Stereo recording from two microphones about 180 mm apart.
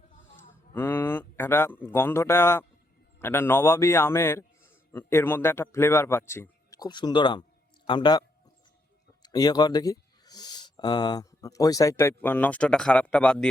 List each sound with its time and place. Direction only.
0.7 s a man's voice: 10° left (ahead or behind)
9.2 s speech: 20° left (ahead or behind); by 13.5 s 5° left (ahead or behind)